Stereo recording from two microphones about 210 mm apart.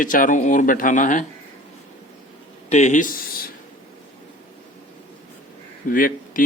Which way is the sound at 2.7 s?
35° left (ahead or behind).